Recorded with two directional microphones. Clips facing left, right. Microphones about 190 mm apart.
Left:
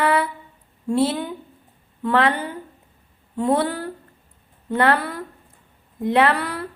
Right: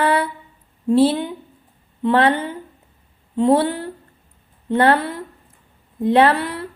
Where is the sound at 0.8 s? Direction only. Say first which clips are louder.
Right 5 dB; 30° right (ahead or behind).